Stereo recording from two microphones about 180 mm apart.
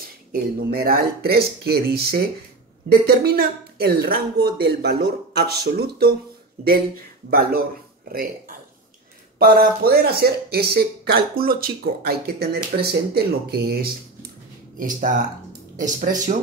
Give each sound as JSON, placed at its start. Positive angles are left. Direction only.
{"t": 0.3, "sound": "speech", "side_deg": -60}
{"t": 7.2, "sound": "speech", "side_deg": -55}
{"t": 9.6, "sound": "speech", "side_deg": -60}
{"t": 14.8, "sound": "speech", "side_deg": -50}